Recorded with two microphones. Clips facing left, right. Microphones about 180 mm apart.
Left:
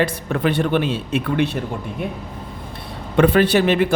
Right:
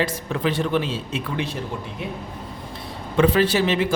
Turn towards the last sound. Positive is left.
turn(degrees=60)  # may be behind; listen again after turning